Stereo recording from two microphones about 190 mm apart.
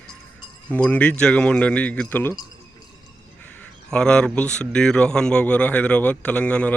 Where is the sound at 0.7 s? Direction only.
5° left (ahead or behind).